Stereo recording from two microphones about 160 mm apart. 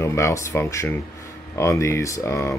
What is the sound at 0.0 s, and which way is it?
Speech, 15° left (ahead or behind).